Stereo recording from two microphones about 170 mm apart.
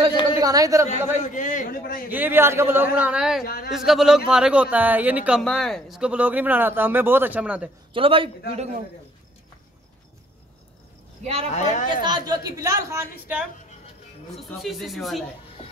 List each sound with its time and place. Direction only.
0.1 s a sound: 30° left (ahead or behind)
0.4 s a woman's voice: 20° right (ahead or behind)
1.1 s a man's voice: 45° left (ahead or behind)
2.0 s speech: 10° right (ahead or behind)
3.4 s a man's voice: 65° left (ahead or behind)
3.7 s speech: centre (ahead or behind)
5.4 s speech: 5° left (ahead or behind)
7.9 s a man's voice: 30° right (ahead or behind)
11.5 s a man's voice: 45° left (ahead or behind)
11.9 s a woman's voice: 25° right (ahead or behind)
14.3 s speech: centre (ahead or behind)